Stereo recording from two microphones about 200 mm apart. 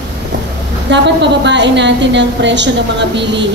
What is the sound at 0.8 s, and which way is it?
A woman's voice, 60° right (ahead or behind).